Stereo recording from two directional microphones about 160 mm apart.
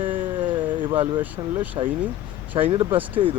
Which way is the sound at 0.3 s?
30° right (ahead or behind).